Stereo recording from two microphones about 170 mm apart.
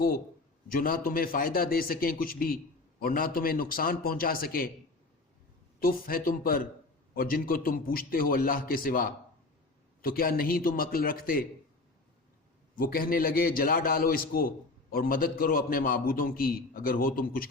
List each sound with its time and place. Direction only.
0.7 s a man's voice: 55° left (ahead or behind)
5.8 s a man's voice: 60° left (ahead or behind)
12.7 s a man's voice: 60° left (ahead or behind)